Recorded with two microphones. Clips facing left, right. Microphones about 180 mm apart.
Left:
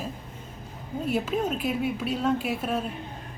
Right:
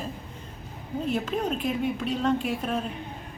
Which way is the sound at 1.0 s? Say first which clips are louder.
Left 1 dB; 10° left (ahead or behind).